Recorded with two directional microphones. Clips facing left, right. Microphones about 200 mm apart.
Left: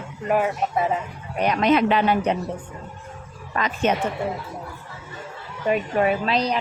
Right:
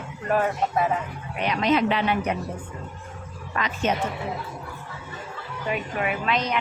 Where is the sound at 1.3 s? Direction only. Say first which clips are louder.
Left 3 dB; 45° left (ahead or behind).